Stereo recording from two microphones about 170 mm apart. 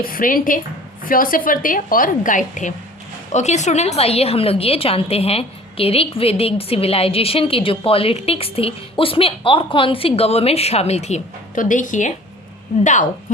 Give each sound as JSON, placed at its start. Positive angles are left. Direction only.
{"t": 0.0, "sound": "a woman's voice", "side_deg": 55}